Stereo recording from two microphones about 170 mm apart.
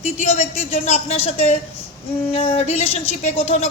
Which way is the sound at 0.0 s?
40° left (ahead or behind).